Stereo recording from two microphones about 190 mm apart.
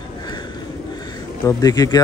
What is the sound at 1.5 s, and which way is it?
Speech, 20° left (ahead or behind).